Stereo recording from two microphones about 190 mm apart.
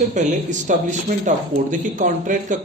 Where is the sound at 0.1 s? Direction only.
40° right (ahead or behind).